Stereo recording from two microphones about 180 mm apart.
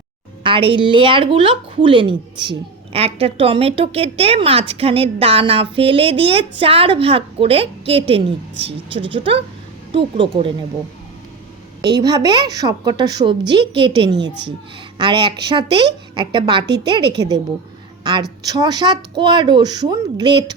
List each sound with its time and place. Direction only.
0.4 s a woman's voice: 30° right (ahead or behind)
11.8 s speech: 25° right (ahead or behind)
18.0 s speech: 20° right (ahead or behind)